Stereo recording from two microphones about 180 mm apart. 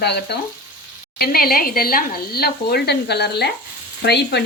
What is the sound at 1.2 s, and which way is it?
Speech, 55° left (ahead or behind).